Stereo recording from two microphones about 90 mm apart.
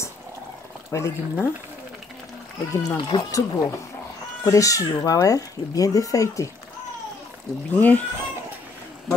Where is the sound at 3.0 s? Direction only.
45° left (ahead or behind).